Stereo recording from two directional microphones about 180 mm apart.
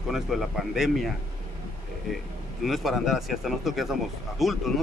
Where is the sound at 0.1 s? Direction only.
Centre (ahead or behind).